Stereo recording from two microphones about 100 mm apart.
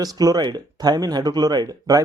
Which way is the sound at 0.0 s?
40° right (ahead or behind).